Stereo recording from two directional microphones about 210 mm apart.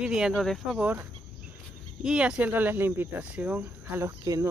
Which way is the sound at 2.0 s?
5° right (ahead or behind).